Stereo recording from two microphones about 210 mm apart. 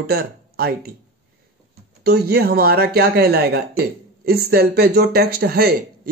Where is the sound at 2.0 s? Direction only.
50° right (ahead or behind).